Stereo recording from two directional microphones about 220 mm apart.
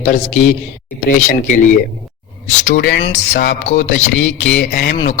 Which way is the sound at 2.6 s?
55° left (ahead or behind).